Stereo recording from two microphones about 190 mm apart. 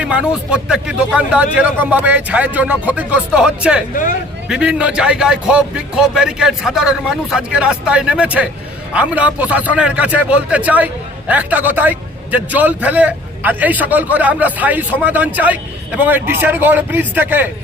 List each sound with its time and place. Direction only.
0.0 s a man's voice: 5° right (ahead or behind)